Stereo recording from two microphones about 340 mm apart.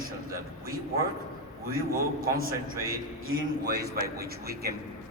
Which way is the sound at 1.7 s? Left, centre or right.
Right.